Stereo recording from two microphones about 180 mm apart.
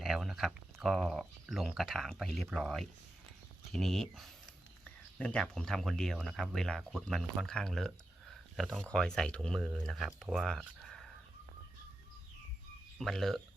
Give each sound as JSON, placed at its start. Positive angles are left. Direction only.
{"t": 0.0, "sound": "speech", "side_deg": 0}
{"t": 10.8, "sound": "dog", "side_deg": 0}
{"t": 13.0, "sound": "speech", "side_deg": 0}